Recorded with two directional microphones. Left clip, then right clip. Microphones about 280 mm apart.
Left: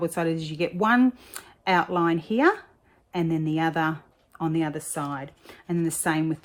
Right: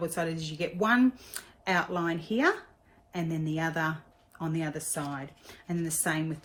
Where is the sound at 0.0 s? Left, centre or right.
Left.